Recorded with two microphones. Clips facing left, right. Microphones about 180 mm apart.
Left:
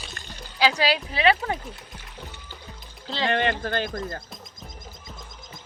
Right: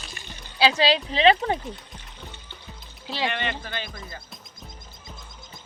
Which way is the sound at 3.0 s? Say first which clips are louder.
Even; 15° right (ahead or behind).